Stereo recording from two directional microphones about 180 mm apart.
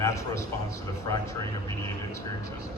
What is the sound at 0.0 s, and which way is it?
Speech, 15° left (ahead or behind).